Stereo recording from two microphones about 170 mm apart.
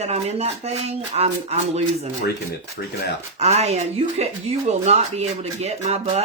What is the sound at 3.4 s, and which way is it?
Speech, 40° right (ahead or behind).